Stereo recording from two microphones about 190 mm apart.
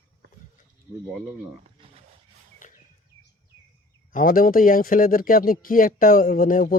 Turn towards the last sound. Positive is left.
turn(degrees=45)  # may be behind; listen again after turning